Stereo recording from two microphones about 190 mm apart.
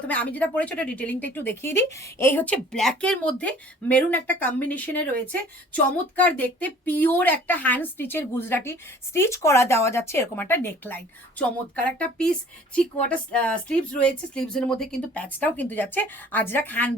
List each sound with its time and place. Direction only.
0.1 s speech: 10° left (ahead or behind)